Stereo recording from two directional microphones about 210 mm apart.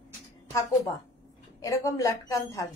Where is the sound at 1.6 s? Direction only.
15° left (ahead or behind).